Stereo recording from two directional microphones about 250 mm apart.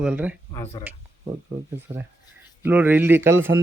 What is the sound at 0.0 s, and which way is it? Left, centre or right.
Speech, centre.